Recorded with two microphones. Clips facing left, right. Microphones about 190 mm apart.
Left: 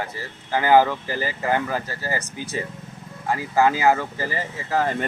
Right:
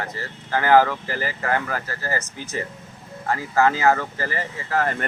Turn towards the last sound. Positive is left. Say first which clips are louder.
# left 1 dB
turn(degrees=20)  # may be behind; listen again after turning